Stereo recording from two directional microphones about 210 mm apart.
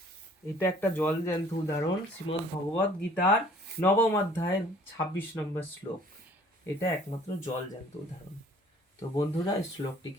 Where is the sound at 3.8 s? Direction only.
10° left (ahead or behind).